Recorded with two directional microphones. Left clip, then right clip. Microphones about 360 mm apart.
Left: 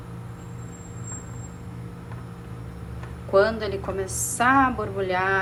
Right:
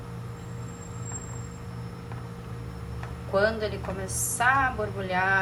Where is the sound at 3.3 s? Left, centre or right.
Left.